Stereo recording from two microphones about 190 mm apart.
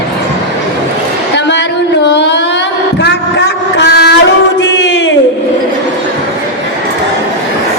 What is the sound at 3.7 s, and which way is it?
Music, 60° left (ahead or behind).